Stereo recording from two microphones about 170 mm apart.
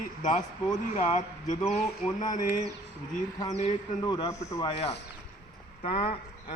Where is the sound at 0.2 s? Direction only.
45° left (ahead or behind).